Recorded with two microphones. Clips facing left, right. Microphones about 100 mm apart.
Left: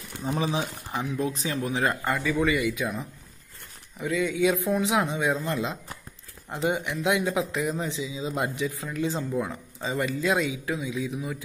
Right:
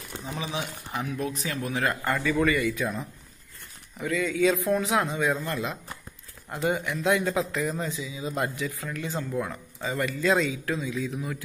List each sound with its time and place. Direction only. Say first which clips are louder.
0.2 s speech: left 6 dB; 40° left (ahead or behind)
2.1 s speech: even; 10° left (ahead or behind)
10.2 s speech: right 4 dB; 10° left (ahead or behind)